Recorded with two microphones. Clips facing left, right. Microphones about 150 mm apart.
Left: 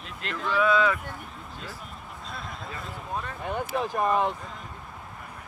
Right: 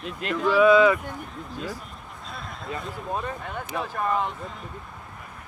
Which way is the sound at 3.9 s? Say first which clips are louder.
Left 1 dB; 15° left (ahead or behind).